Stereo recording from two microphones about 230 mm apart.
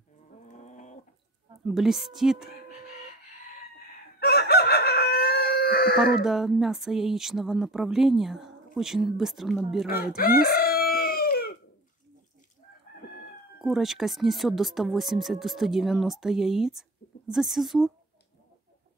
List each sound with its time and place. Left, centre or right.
0.5 s bird: left
1.7 s speech: centre
4.2 s chicken: left
6.1 s speech: centre
10.4 s chicken: left
13.6 s speech: centre